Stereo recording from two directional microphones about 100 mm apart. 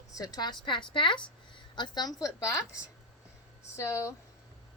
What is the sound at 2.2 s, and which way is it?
Speech, 30° left (ahead or behind).